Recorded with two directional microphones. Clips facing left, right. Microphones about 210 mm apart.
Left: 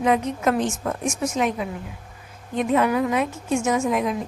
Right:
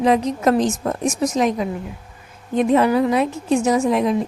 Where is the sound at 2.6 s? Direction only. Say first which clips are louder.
Right 4 dB; 35° right (ahead or behind).